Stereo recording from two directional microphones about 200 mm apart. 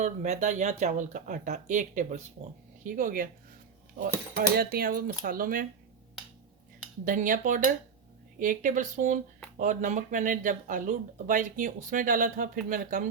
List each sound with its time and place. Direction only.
0.0 s speech: 35° right (ahead or behind)
7.0 s speech: 40° right (ahead or behind)